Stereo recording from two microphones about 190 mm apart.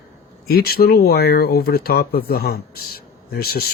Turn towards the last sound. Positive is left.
turn(degrees=55)  # may be behind; listen again after turning